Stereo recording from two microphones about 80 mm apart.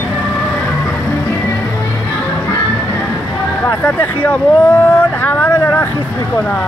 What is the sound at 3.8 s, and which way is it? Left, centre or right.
Speech, centre.